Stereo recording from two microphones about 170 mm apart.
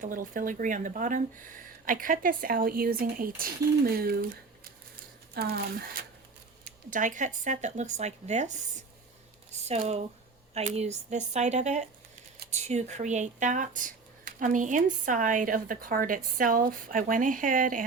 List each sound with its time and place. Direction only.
0.0 s speech: 50° right (ahead or behind)
6.9 s speech: 50° right (ahead or behind)